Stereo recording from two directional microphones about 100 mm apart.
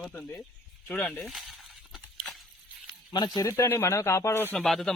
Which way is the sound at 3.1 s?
45° left (ahead or behind).